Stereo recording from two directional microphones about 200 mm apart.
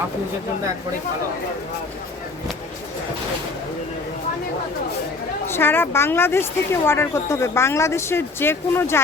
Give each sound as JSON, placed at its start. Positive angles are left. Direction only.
{"t": 5.5, "sound": "speech", "side_deg": 10}